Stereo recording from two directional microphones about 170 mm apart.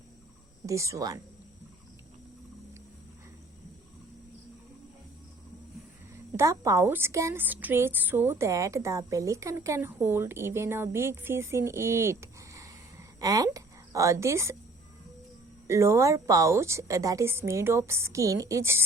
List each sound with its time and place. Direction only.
0.6 s speech: 20° right (ahead or behind)
6.3 s a woman's voice: 20° right (ahead or behind)
15.6 s a woman's voice: 15° right (ahead or behind)